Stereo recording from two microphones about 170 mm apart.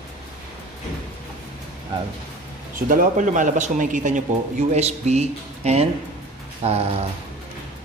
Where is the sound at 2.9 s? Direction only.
50° right (ahead or behind).